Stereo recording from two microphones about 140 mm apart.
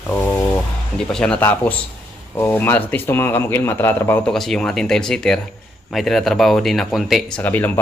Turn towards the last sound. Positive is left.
turn(degrees=15)  # may be behind; listen again after turning